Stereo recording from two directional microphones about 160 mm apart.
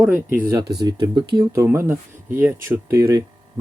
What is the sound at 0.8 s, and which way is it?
Speech, 25° right (ahead or behind).